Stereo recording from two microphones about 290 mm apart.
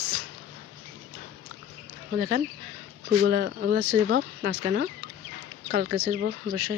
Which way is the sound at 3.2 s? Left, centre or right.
Right.